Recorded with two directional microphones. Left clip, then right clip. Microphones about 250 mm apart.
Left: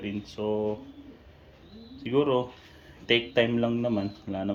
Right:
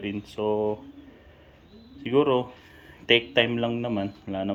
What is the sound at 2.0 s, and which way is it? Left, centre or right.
Speech, centre.